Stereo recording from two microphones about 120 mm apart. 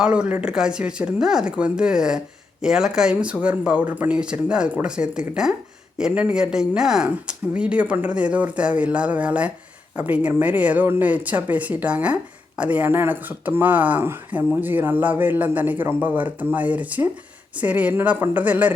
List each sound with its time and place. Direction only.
0.0 s speech: 10° right (ahead or behind)